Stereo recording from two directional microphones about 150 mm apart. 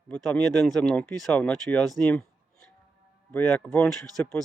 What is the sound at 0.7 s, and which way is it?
Speech, 5° left (ahead or behind).